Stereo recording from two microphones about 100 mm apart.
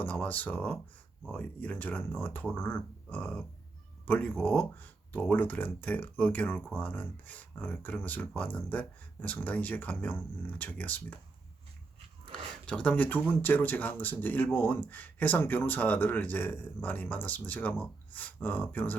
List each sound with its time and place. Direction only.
0.0 s speech: 15° left (ahead or behind)
2.6 s a sound: 15° left (ahead or behind)
4.0 s speech: 15° left (ahead or behind)
12.6 s speech: 10° left (ahead or behind)